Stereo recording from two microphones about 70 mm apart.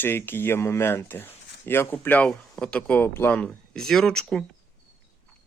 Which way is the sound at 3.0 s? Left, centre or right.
Left.